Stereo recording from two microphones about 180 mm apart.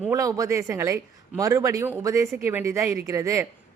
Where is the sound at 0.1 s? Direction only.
20° right (ahead or behind).